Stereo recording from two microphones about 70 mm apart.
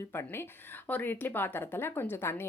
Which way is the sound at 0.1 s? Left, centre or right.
Left.